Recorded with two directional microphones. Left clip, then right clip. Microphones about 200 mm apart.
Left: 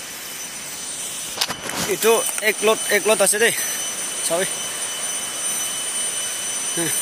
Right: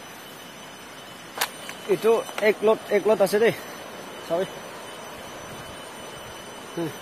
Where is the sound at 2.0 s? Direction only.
5° right (ahead or behind).